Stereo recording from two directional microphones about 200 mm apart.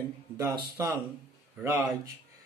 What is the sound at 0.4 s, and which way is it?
Speech, 15° right (ahead or behind).